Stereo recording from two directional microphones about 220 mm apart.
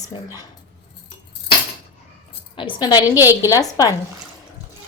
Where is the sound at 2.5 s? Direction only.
20° left (ahead or behind).